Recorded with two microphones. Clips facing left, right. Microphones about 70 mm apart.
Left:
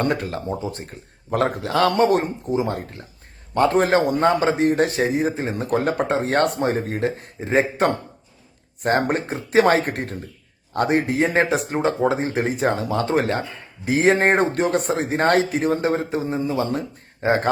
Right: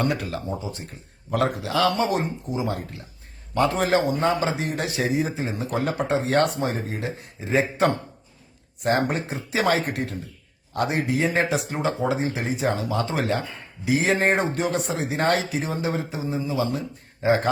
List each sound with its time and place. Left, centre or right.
0.0 s a man's voice: left
8.8 s a man's voice: left